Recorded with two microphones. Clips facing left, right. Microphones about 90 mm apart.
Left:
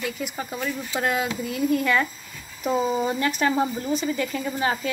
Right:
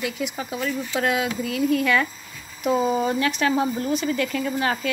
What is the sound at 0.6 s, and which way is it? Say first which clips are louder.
Speech: right 3 dB; 10° left (ahead or behind).